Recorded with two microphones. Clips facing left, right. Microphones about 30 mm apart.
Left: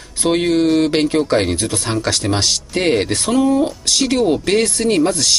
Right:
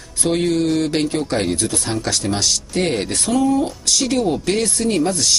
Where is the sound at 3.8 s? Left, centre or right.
Left.